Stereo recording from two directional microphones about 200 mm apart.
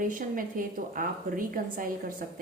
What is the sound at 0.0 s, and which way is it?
A woman's voice, 40° right (ahead or behind).